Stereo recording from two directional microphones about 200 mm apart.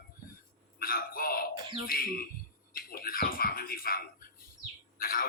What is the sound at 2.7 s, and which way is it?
Music, 45° left (ahead or behind).